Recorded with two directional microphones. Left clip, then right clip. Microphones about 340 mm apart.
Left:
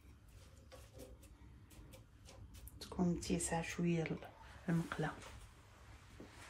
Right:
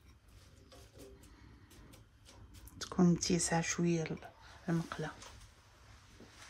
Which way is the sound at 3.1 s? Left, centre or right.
Right.